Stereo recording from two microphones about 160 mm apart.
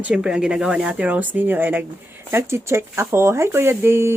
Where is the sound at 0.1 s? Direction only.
5° right (ahead or behind).